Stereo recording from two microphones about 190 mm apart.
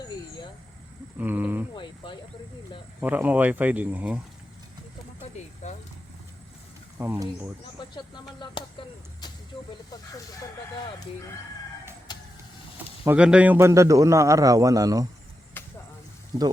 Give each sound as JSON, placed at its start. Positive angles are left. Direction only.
{"t": 1.2, "sound": "a man's voice", "side_deg": -10}
{"t": 1.7, "sound": "speech", "side_deg": 25}
{"t": 3.0, "sound": "a man's voice", "side_deg": -10}
{"t": 5.6, "sound": "vehicle", "side_deg": 40}
{"t": 7.0, "sound": "a man's voice", "side_deg": -10}
{"t": 7.8, "sound": "speech", "side_deg": 25}
{"t": 12.1, "sound": "vehicle", "side_deg": 20}
{"t": 13.1, "sound": "a man's voice", "side_deg": -5}
{"t": 15.6, "sound": "a sound", "side_deg": 10}
{"t": 16.3, "sound": "speech", "side_deg": -20}